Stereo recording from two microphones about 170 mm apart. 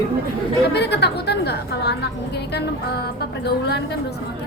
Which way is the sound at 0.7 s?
75° left (ahead or behind).